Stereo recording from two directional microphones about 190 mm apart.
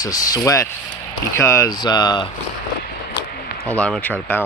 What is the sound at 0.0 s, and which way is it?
Speech, 20° left (ahead or behind).